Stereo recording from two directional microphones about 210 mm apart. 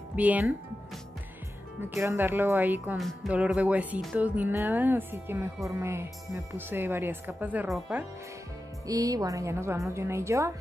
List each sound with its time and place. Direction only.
0.1 s music: 5° right (ahead or behind)
2.0 s music: 10° right (ahead or behind)
8.8 s music: 15° right (ahead or behind)